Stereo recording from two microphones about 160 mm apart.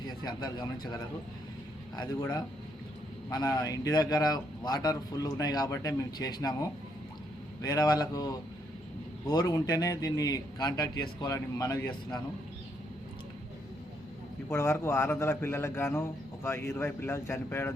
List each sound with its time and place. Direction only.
0.3 s speech: 25° left (ahead or behind)
3.2 s speech: 25° left (ahead or behind)
14.5 s a man's voice: 15° left (ahead or behind)